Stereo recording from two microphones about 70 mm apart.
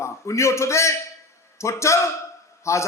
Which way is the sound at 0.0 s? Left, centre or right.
Left.